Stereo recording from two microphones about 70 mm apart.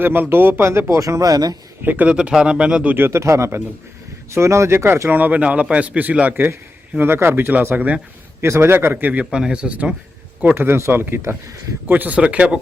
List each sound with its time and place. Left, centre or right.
0.0 s speech: right
1.8 s a man's voice: right
2.0 s speech: centre
3.1 s a man's voice: right
7.0 s speech: right
7.8 s a man's voice: centre
8.4 s speech: right
9.3 s speech: centre
10.4 s speech: right
11.9 s a man's voice: right